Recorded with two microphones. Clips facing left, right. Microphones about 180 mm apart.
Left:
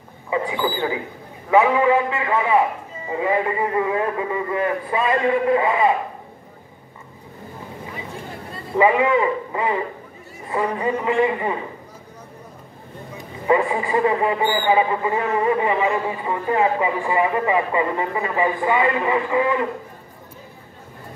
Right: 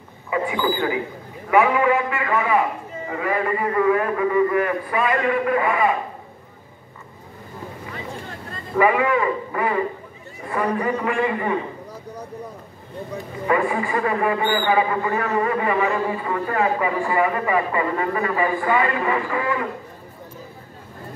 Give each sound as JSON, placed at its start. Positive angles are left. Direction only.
{"t": 0.3, "sound": "a man's voice", "side_deg": 25}
{"t": 8.7, "sound": "a man's voice", "side_deg": 20}
{"t": 13.5, "sound": "a man's voice", "side_deg": 20}